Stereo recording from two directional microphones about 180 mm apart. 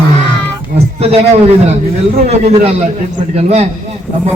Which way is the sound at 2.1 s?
40° right (ahead or behind).